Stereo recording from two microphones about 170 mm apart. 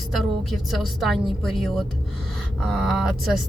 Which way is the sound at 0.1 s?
Centre (ahead or behind).